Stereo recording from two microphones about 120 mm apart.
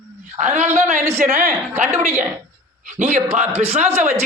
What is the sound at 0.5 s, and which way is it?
Speech, 70° right (ahead or behind).